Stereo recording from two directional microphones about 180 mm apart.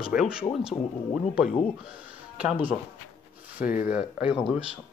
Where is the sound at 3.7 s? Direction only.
50° left (ahead or behind).